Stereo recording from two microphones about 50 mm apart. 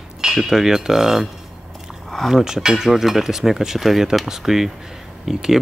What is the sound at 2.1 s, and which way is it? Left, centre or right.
Speech, centre.